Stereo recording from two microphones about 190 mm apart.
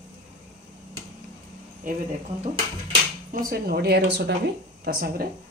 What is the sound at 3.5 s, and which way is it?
Speech, 55° right (ahead or behind).